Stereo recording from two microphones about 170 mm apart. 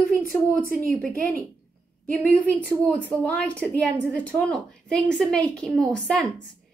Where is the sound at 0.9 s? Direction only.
10° left (ahead or behind).